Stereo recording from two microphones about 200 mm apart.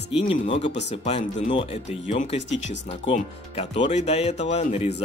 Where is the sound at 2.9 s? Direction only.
30° left (ahead or behind).